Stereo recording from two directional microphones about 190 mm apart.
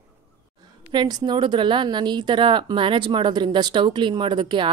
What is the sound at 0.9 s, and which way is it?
A woman's voice, 20° right (ahead or behind).